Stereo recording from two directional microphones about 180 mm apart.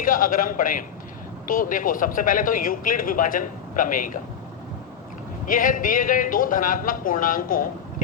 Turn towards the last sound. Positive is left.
turn(degrees=50)  # may be behind; listen again after turning